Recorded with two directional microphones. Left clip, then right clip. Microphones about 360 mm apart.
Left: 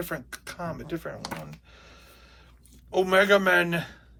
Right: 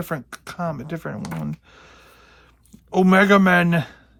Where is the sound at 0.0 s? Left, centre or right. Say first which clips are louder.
Right 4 dB; centre.